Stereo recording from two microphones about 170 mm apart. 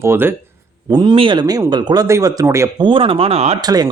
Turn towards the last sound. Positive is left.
turn(degrees=-25)  # may be behind; listen again after turning